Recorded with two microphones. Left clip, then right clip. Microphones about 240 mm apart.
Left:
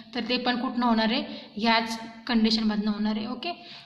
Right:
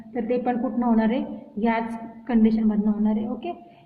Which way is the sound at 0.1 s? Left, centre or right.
Left.